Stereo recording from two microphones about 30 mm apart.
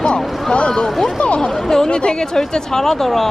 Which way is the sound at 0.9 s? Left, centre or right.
Centre.